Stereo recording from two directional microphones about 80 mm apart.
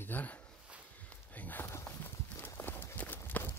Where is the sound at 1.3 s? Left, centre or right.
Left.